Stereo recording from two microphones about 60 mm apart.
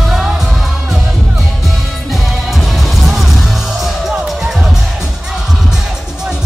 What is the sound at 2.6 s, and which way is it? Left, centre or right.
Music, centre.